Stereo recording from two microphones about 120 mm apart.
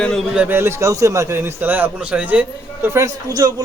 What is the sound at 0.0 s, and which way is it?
Speech, 5° left (ahead or behind).